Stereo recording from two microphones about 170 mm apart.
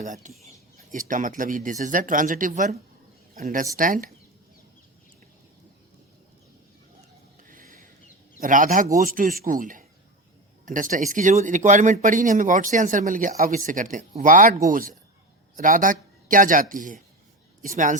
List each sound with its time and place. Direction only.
0.0 s speech: 45° right (ahead or behind)
7.4 s a sound: 55° right (ahead or behind)
8.4 s a man's voice: 50° right (ahead or behind)